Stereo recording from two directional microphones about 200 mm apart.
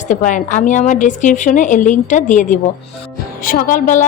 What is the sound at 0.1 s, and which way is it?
A woman's voice, 40° left (ahead or behind).